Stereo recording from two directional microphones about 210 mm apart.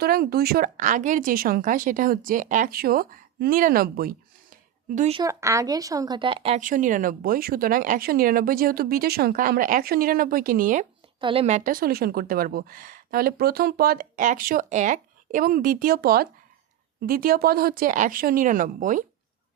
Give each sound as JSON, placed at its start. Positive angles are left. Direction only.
{"t": 0.0, "sound": "speech", "side_deg": -45}
{"t": 4.9, "sound": "a woman's voice", "side_deg": -30}
{"t": 5.2, "sound": "speech", "side_deg": -15}
{"t": 11.2, "sound": "speech", "side_deg": -25}